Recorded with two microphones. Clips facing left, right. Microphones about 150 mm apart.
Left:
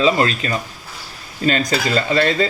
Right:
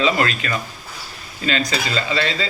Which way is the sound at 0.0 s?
30° left (ahead or behind).